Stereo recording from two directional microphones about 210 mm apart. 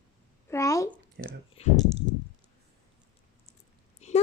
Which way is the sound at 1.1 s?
50° right (ahead or behind).